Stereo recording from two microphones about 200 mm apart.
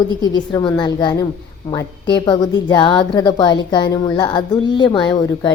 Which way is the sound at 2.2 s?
20° left (ahead or behind).